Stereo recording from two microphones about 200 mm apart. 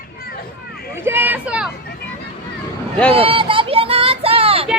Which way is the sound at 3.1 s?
25° right (ahead or behind).